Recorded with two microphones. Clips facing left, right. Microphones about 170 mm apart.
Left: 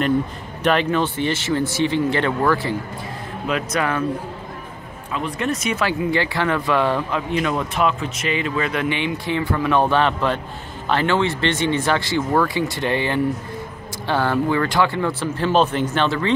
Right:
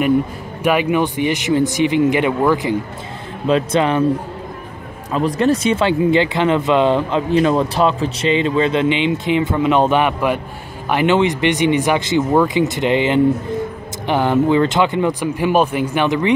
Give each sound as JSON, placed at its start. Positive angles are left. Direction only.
{"t": 0.7, "sound": "speech", "side_deg": -10}
{"t": 3.4, "sound": "speech", "side_deg": -30}
{"t": 5.1, "sound": "speech", "side_deg": -35}